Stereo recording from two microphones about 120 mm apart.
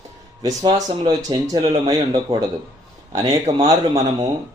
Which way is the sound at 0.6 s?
35° right (ahead or behind).